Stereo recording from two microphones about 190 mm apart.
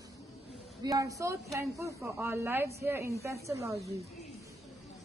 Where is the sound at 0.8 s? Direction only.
20° right (ahead or behind).